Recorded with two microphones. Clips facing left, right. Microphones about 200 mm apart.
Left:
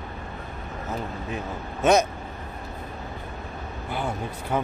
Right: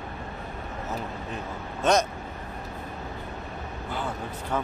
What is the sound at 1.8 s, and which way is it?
Speech, 10° left (ahead or behind).